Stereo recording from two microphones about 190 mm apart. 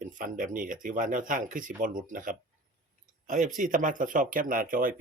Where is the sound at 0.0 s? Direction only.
45° right (ahead or behind).